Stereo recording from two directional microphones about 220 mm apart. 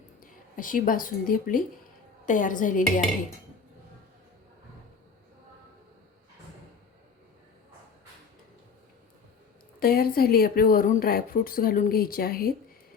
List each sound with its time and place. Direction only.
0.2 s a woman's voice: 40° left (ahead or behind)
9.8 s speech: 40° left (ahead or behind)